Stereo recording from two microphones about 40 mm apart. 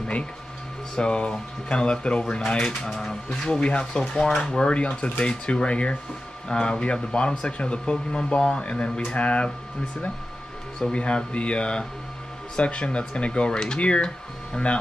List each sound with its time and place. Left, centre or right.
0.9 s speech: left
3.0 s speech: centre
3.6 s speech: left
4.0 s speech: centre
10.9 s speech: left